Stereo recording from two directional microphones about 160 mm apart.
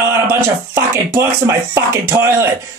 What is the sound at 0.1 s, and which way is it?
Music, 15° right (ahead or behind).